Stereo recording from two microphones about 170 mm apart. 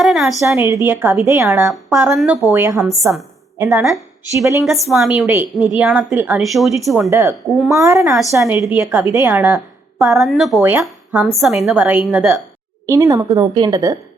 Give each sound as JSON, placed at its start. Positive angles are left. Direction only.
{"t": 0.0, "sound": "a sound", "side_deg": 0}
{"t": 0.4, "sound": "a woman's voice", "side_deg": -15}
{"t": 2.1, "sound": "a woman's voice", "side_deg": -5}
{"t": 2.5, "sound": "a woman's voice", "side_deg": -15}
{"t": 4.6, "sound": "a woman's voice", "side_deg": 0}
{"t": 7.1, "sound": "a woman's voice", "side_deg": -15}
{"t": 10.2, "sound": "a woman's voice", "side_deg": 0}
{"t": 10.6, "sound": "a woman's voice", "side_deg": -10}
{"t": 11.2, "sound": "a woman's voice", "side_deg": 0}
{"t": 12.8, "sound": "a woman's voice", "side_deg": -15}